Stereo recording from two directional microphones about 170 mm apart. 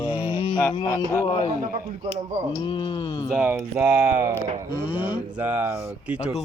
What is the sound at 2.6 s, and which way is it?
Music, 30° left (ahead or behind).